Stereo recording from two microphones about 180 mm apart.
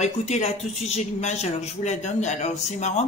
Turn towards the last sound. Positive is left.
turn(degrees=40)  # may be behind; listen again after turning